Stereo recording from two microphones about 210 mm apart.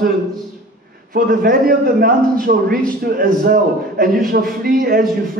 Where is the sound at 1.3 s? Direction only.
40° right (ahead or behind).